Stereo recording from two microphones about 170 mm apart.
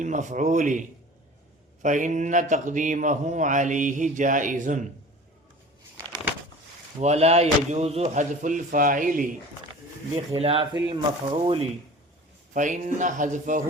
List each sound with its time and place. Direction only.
0.0 s a man's voice: 45° right (ahead or behind)
7.0 s a man's voice: 40° right (ahead or behind)
10.3 s speech: 35° right (ahead or behind)
12.5 s a man's voice: 45° right (ahead or behind)